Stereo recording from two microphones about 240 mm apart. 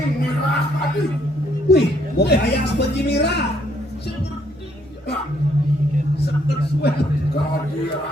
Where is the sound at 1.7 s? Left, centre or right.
Left.